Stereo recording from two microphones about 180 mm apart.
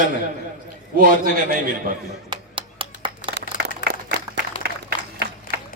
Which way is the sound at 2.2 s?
30° right (ahead or behind).